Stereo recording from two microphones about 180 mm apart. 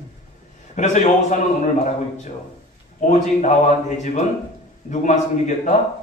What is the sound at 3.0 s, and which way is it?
A man's voice, 45° left (ahead or behind).